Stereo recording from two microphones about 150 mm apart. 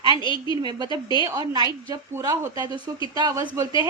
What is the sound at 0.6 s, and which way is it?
A woman's voice, 30° right (ahead or behind).